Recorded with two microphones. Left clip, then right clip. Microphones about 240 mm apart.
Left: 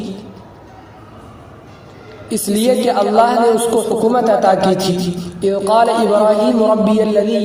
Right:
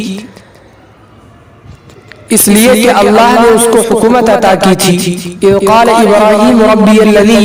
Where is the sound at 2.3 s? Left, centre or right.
Right.